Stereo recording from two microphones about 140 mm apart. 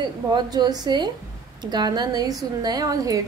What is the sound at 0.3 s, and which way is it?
A woman's voice, 30° right (ahead or behind).